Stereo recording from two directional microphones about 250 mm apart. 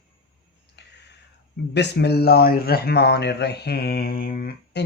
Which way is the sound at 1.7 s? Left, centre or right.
Left.